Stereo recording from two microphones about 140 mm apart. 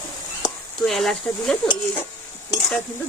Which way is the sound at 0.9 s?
Centre (ahead or behind).